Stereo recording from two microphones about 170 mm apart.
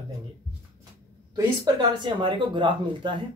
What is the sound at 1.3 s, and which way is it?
Speech, 25° right (ahead or behind).